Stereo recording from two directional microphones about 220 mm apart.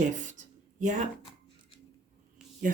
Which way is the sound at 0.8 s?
35° right (ahead or behind).